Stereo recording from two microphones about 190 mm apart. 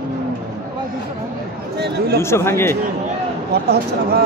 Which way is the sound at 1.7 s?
60° right (ahead or behind).